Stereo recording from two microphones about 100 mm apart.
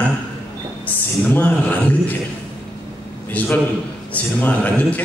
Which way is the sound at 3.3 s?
20° left (ahead or behind).